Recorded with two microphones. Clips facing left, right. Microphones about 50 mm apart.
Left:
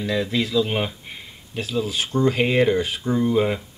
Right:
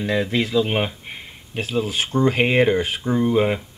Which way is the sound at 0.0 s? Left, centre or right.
Right.